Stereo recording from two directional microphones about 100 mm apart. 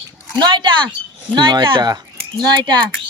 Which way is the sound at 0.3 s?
50° right (ahead or behind).